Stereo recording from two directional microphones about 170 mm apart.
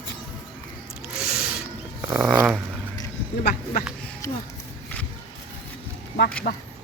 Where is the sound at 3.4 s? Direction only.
65° left (ahead or behind).